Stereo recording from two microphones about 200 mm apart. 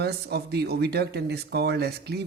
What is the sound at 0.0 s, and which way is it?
Speech, 55° right (ahead or behind).